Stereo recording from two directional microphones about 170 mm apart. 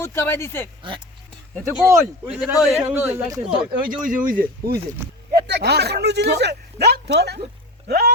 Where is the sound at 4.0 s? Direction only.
50° right (ahead or behind).